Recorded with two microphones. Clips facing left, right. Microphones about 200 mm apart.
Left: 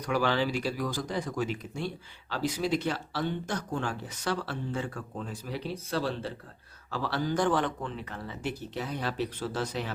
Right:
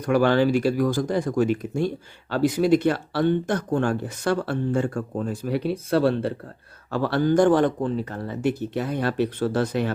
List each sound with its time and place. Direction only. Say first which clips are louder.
0.0 s speech: right 9 dB; 50° right (ahead or behind)
8.4 s speech: right 10 dB; 55° right (ahead or behind)